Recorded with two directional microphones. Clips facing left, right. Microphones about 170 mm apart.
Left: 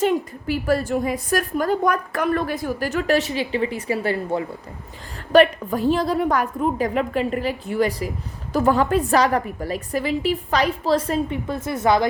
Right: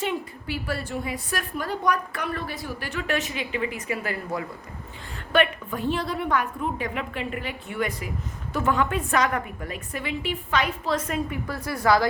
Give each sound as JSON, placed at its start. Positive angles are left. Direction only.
{"t": 0.0, "sound": "a woman's voice", "side_deg": 40}